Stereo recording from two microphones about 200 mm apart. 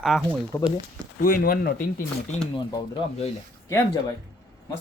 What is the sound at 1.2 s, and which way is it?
Speech, 45° left (ahead or behind).